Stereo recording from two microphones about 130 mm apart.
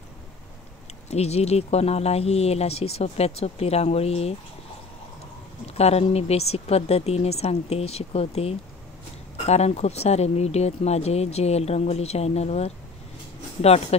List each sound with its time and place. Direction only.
1.1 s speech: 55° left (ahead or behind)
5.8 s speech: 55° left (ahead or behind)